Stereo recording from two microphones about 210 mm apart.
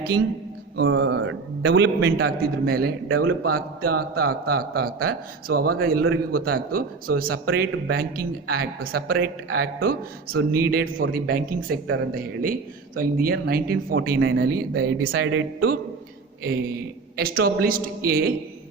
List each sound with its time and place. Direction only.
0.8 s a man's voice: 60° right (ahead or behind)
14.2 s speech: 70° right (ahead or behind)
17.2 s a man's voice: 45° right (ahead or behind)